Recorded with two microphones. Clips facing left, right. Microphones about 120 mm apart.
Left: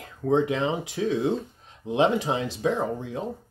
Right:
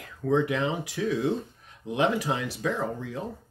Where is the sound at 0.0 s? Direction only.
25° left (ahead or behind).